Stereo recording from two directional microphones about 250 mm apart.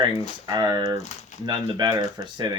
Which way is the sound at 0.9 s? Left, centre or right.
Left.